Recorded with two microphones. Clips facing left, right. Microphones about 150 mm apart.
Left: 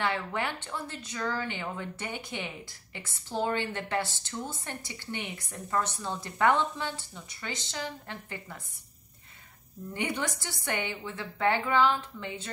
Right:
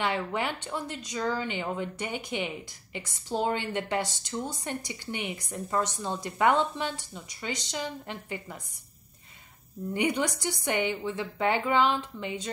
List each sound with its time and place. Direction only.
0.0 s speech: 15° right (ahead or behind)
9.9 s speech: 15° right (ahead or behind)